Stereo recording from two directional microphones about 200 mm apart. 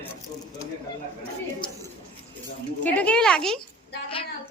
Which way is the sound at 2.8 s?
5° left (ahead or behind).